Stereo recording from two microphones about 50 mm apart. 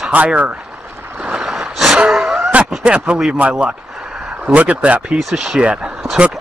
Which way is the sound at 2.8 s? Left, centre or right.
Right.